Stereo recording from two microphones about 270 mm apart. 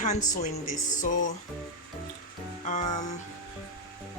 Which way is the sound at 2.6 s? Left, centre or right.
Left.